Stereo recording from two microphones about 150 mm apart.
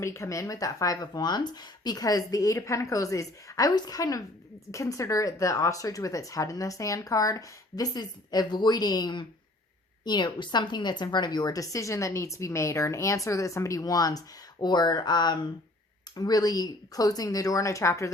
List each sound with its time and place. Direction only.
0.0 s a woman's voice: 20° left (ahead or behind)